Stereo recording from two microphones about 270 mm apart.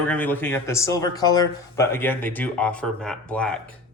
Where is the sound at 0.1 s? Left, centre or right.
Centre.